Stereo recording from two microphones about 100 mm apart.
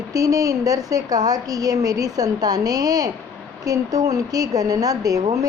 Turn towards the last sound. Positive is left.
turn(degrees=-40)  # may be behind; listen again after turning